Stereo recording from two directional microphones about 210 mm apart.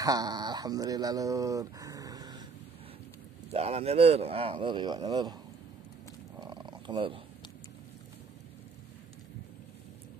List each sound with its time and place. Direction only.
0.0 s speech: 20° right (ahead or behind)
3.5 s speech: 30° right (ahead or behind)
6.4 s purr: 20° right (ahead or behind)